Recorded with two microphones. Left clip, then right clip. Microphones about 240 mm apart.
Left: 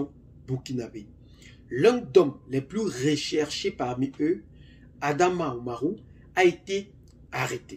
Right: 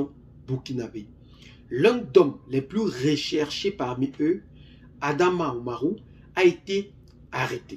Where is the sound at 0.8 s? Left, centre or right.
Left.